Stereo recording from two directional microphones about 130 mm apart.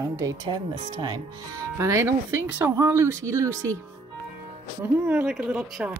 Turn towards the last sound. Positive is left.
turn(degrees=-10)  # may be behind; listen again after turning